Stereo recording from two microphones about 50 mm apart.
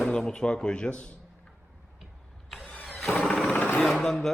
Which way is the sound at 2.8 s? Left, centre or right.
Left.